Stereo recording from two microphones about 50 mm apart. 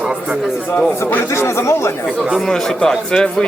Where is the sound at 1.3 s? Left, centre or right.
Left.